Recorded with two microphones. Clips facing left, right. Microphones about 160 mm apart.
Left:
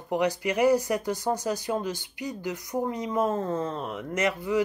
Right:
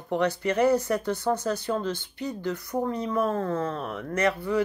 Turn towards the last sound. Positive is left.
turn(degrees=15)  # may be behind; listen again after turning